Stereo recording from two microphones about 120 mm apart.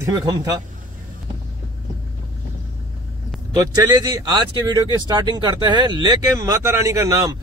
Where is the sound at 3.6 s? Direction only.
30° right (ahead or behind).